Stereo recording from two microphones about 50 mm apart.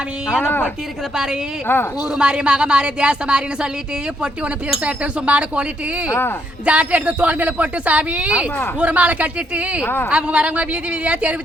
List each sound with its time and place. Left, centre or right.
1.1 s a woman's voice: centre
1.6 s a woman's voice: left
2.1 s a woman's voice: centre
4.8 s a woman's voice: right
6.7 s a woman's voice: right
9.8 s a woman's voice: left
10.1 s a woman's voice: right